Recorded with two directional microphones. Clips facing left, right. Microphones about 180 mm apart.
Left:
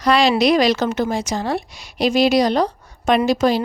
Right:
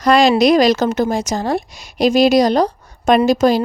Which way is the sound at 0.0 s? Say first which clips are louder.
Right 4 dB; 45° right (ahead or behind).